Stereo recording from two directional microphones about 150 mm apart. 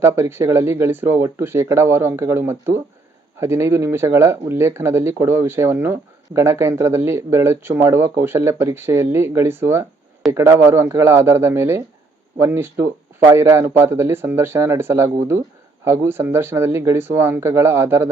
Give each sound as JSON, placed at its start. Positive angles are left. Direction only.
{"t": 0.0, "sound": "speech", "side_deg": -15}